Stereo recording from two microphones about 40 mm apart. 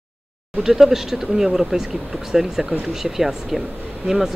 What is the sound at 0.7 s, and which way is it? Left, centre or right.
Speech, centre.